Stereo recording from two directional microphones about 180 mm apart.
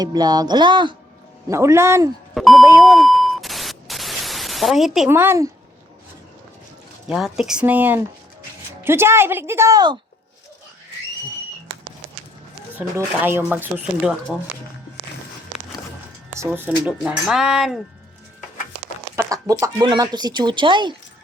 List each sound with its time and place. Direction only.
0.0 s speech: 20° right (ahead or behind)
2.3 s beep: centre (ahead or behind)
2.8 s a sound: centre (ahead or behind)
5.0 s speech: 15° right (ahead or behind)
7.1 s speech: 5° right (ahead or behind); by 10.0 s 20° right (ahead or behind)
12.7 s speech: 10° right (ahead or behind)
16.3 s speech: 15° right (ahead or behind)
19.1 s speech: 15° right (ahead or behind)